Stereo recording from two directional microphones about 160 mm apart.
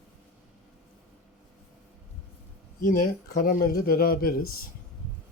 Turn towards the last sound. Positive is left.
turn(degrees=65)  # may be behind; listen again after turning